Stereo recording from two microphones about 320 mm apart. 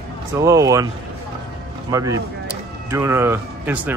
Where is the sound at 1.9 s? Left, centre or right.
Centre.